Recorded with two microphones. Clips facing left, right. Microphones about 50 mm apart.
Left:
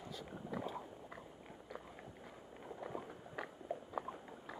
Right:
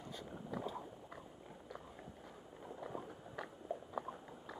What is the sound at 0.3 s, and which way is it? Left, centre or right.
Boat, centre.